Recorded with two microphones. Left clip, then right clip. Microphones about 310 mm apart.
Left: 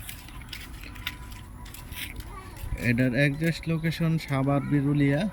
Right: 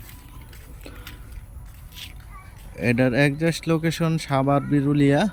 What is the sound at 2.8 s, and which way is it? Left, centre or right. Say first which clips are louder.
Speech: right 5 dB; centre.